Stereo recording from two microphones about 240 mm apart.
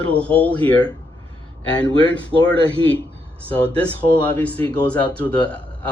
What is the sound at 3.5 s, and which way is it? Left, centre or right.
Speech, centre.